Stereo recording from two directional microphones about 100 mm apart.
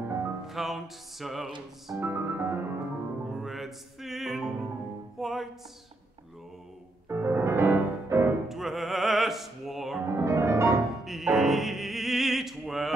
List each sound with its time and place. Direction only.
0.1 s music: 25° right (ahead or behind)
0.4 s music: 5° right (ahead or behind)
2.0 s music: 25° right (ahead or behind)
3.3 s music: 5° right (ahead or behind)
7.1 s music: 25° right (ahead or behind)
8.5 s music: centre (ahead or behind)
10.0 s music: 25° right (ahead or behind)
11.1 s opera: centre (ahead or behind)